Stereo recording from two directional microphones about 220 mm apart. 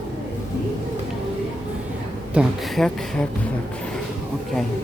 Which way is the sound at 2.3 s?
Centre (ahead or behind).